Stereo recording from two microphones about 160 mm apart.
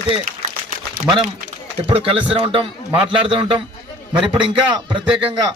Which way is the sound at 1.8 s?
35° right (ahead or behind).